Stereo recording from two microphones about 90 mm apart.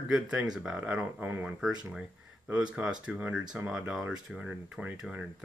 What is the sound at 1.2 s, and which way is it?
Speech, 25° right (ahead or behind).